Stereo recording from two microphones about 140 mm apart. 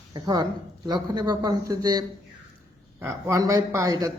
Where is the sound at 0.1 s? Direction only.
30° right (ahead or behind).